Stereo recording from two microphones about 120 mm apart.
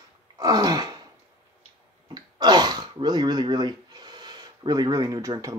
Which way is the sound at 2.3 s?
35° right (ahead or behind).